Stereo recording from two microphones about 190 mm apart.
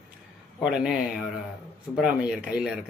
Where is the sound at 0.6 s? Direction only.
5° right (ahead or behind).